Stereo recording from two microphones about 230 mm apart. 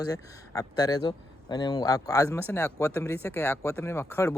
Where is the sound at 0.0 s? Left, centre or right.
Centre.